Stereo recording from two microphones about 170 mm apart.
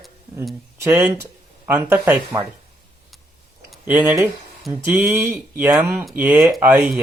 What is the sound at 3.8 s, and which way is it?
Speech, 10° right (ahead or behind).